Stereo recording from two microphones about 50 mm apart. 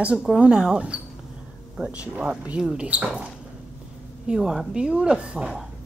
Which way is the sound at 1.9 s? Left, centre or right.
Right.